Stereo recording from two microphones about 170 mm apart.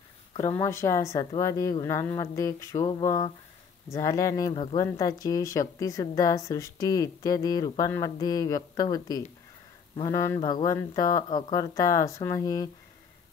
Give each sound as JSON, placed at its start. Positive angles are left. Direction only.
{"t": 0.3, "sound": "speech", "side_deg": 25}